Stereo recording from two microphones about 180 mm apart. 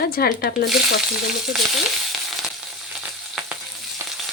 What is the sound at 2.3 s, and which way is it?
Frying, centre (ahead or behind).